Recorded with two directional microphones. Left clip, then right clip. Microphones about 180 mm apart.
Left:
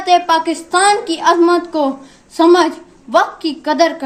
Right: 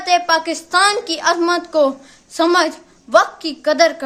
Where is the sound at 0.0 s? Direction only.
20° right (ahead or behind).